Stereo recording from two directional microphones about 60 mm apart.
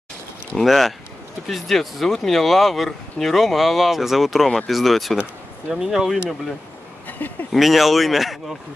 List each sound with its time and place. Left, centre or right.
0.6 s speech: centre
7.1 s a sound: left
7.5 s speech: centre